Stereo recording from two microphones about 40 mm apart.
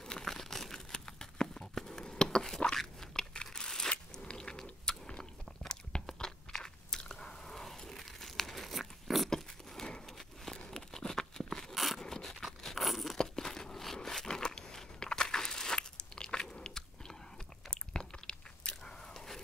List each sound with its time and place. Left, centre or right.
0.0 s crumpling: centre
1.6 s a sound: centre
2.0 s crunch: left
4.1 s biting: centre
9.3 s biting: centre
10.0 s a sound: centre
10.8 s tearing: centre
11.7 s a sound: centre
12.0 s crunch: centre
13.2 s tearing: centre
13.9 s a sound: centre
17.6 s biting: left